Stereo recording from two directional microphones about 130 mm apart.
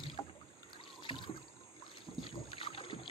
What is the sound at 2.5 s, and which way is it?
Boat, 45° left (ahead or behind).